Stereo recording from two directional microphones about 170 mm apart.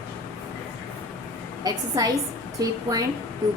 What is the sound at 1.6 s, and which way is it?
A woman's voice, 20° right (ahead or behind).